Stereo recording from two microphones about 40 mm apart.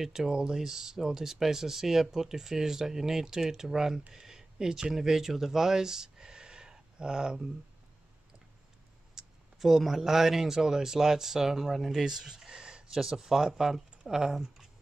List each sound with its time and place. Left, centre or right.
0.0 s speech: centre
4.1 s a sound: centre
4.9 s speech: centre
9.1 s speech: centre